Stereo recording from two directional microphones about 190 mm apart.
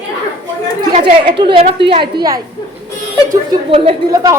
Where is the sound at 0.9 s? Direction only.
25° right (ahead or behind).